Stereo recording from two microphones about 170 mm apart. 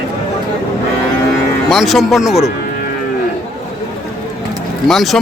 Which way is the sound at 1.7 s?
Centre (ahead or behind).